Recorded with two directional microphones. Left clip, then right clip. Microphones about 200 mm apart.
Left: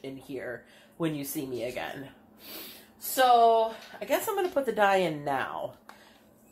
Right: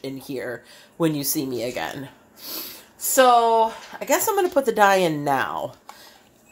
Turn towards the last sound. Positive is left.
turn(degrees=-45)  # may be behind; listen again after turning